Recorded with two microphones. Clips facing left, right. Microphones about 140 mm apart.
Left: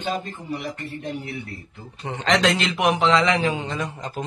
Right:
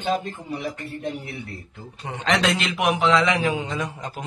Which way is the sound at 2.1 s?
5° right (ahead or behind).